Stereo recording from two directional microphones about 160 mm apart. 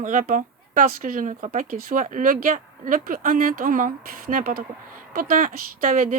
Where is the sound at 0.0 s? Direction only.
55° right (ahead or behind).